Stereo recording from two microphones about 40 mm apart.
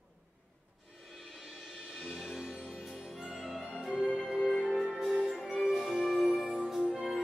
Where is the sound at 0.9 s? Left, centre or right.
Centre.